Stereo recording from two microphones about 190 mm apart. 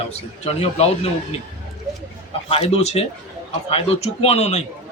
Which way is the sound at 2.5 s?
30° left (ahead or behind).